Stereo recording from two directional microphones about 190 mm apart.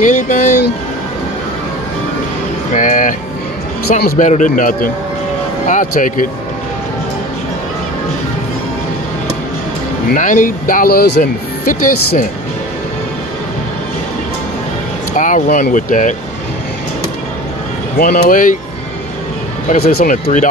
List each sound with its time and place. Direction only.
0.0 s speech: 40° left (ahead or behind)
2.7 s a sound: 45° left (ahead or behind)
4.0 s speech: 40° left (ahead or behind)
10.1 s speech: 40° left (ahead or behind)
15.1 s speech: 45° left (ahead or behind)
17.9 s speech: 55° left (ahead or behind)
19.7 s speech: 55° left (ahead or behind)